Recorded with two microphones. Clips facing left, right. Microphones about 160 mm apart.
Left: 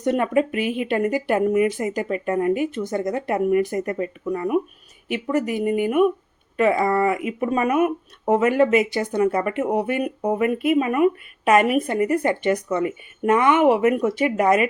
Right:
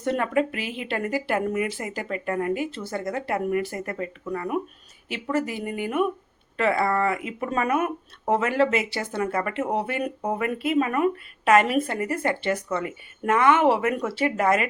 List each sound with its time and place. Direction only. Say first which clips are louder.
0.0 s speech: left 4 dB; 20° left (ahead or behind)